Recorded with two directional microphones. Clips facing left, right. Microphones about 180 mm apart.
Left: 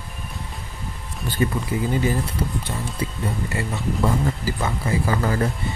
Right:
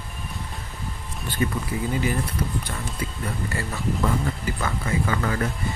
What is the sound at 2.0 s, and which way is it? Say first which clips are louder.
Speech: left 2 dB; 25° left (ahead or behind).